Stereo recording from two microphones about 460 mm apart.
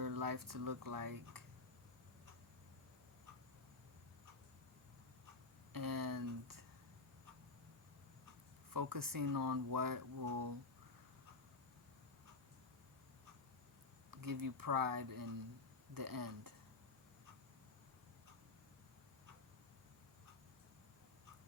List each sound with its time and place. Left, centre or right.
0.0 s speech: right
5.7 s speech: right
8.7 s speech: right
14.1 s speech: right